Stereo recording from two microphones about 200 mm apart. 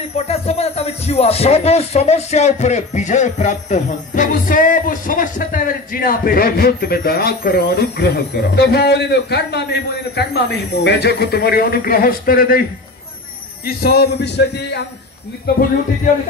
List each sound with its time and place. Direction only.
0.3 s speech: 30° left (ahead or behind); by 9.7 s 55° left (ahead or behind)
10.8 s speech: 55° left (ahead or behind)
13.7 s a man's voice: 50° left (ahead or behind)